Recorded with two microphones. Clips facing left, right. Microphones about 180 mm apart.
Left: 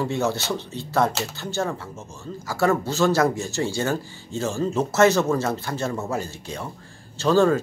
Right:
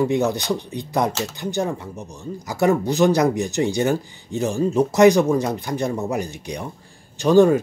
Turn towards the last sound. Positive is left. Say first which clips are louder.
# right 4 dB
turn(degrees=-15)  # may be behind; listen again after turning